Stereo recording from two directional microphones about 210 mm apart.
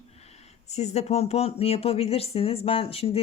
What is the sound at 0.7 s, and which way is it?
Speech, 30° left (ahead or behind).